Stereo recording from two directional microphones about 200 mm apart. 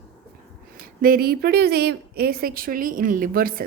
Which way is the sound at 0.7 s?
45° right (ahead or behind).